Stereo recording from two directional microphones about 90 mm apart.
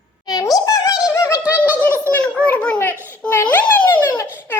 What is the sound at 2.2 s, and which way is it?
Speech, 15° left (ahead or behind).